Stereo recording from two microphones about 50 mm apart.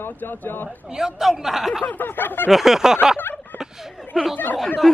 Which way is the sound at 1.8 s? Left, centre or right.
Left.